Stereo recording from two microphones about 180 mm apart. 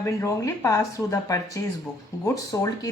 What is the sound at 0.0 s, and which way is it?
Speech, 15° left (ahead or behind).